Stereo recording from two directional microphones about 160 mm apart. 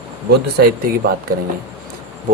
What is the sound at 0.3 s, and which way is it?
Speech, 70° right (ahead or behind).